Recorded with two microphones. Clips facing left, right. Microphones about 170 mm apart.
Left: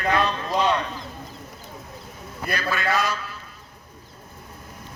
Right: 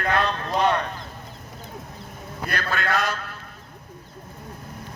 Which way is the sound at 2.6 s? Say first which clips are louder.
Left 1 dB; 55° right (ahead or behind).